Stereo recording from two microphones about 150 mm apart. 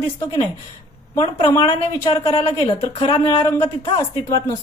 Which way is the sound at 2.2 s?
35° left (ahead or behind).